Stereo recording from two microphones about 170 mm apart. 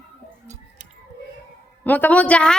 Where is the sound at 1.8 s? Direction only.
10° left (ahead or behind).